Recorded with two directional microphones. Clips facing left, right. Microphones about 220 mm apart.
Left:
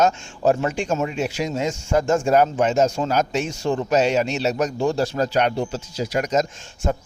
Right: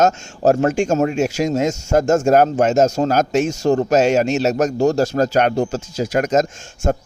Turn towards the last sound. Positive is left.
turn(degrees=-50)  # may be behind; listen again after turning